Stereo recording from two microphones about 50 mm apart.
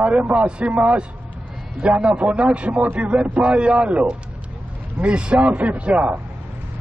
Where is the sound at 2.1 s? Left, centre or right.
Right.